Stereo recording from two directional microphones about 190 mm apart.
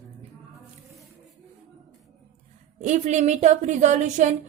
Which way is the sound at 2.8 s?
40° right (ahead or behind).